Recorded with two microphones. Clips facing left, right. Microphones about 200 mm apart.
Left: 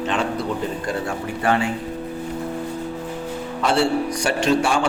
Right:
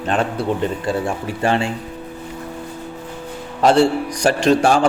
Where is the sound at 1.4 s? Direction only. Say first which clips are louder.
Right 2 dB; 30° right (ahead or behind).